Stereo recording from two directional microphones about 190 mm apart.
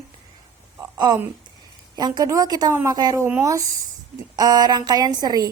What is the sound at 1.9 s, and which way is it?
A woman's voice, 20° right (ahead or behind).